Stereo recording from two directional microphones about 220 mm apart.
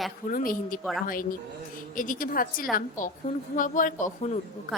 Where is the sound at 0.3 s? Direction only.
40° left (ahead or behind).